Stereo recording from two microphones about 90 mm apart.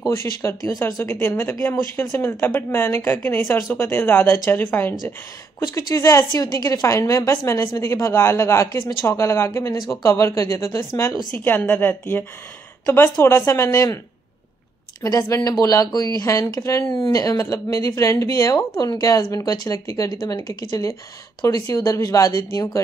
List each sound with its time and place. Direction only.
0.1 s speech: 30° left (ahead or behind)
5.6 s a woman's voice: 40° left (ahead or behind)
11.3 s a woman's voice: 20° left (ahead or behind); by 13.9 s 35° left (ahead or behind)
15.0 s a woman's voice: 45° left (ahead or behind)
20.1 s speech: 55° left (ahead or behind)
20.3 s a woman's voice: 40° left (ahead or behind)